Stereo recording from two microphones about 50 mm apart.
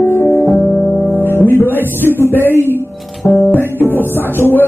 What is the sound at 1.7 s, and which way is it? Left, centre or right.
Speech, left.